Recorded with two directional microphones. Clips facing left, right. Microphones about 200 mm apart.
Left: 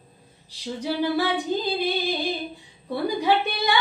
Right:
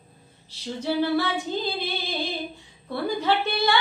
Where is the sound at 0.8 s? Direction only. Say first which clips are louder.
Even; 15° left (ahead or behind).